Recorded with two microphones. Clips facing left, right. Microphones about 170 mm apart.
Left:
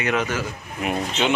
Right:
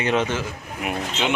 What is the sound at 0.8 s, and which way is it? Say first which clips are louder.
Speech: left 2 dB; 10° right (ahead or behind).